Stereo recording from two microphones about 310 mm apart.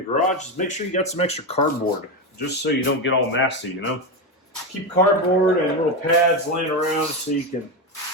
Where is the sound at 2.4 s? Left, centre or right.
Left.